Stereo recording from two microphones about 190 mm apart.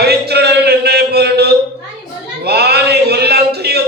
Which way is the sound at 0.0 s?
60° right (ahead or behind).